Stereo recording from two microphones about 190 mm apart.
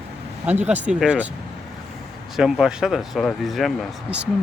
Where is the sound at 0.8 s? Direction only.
5° right (ahead or behind).